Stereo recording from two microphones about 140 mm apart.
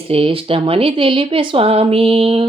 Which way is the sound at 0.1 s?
40° right (ahead or behind).